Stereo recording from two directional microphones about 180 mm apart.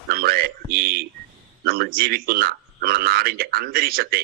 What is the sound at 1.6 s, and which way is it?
A man's voice, 60° right (ahead or behind).